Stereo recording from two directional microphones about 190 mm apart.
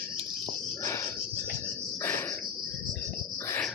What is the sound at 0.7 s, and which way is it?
Cricket, 15° left (ahead or behind).